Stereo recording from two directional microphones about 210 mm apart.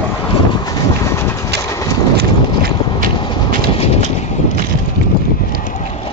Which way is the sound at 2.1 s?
50° right (ahead or behind).